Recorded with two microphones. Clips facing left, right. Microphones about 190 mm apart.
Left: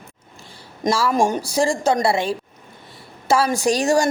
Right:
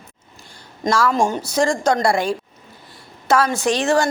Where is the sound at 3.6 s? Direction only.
35° left (ahead or behind).